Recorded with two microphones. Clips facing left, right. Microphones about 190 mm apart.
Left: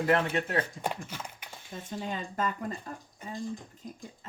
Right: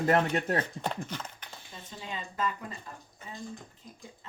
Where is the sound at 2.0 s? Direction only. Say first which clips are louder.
Left 1 dB; 45° left (ahead or behind).